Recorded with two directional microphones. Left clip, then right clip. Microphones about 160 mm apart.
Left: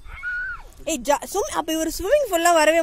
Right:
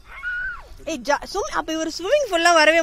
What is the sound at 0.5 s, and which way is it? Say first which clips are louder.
Speech: left 2 dB; 30° left (ahead or behind).